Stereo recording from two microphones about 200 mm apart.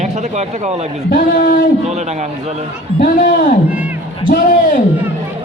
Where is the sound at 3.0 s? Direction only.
45° left (ahead or behind).